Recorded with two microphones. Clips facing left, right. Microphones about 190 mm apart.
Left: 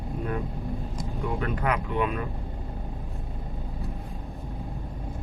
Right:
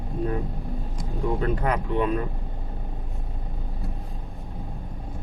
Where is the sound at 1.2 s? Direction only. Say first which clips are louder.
Right 4 dB; 35° right (ahead or behind).